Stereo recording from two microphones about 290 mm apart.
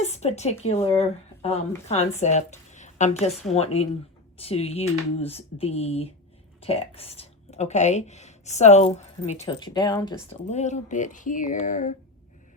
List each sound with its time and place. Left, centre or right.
0.0 s speech: left